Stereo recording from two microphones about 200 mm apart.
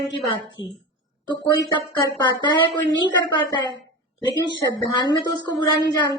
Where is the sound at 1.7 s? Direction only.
20° left (ahead or behind).